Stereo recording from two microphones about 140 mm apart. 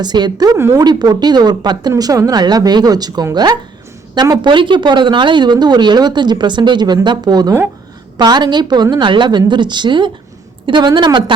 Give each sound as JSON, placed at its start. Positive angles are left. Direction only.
{"t": 0.0, "sound": "speech", "side_deg": -30}